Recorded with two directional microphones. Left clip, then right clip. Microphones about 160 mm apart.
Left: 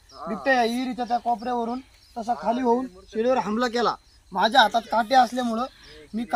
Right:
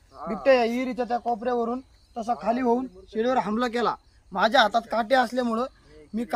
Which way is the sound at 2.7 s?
15° left (ahead or behind).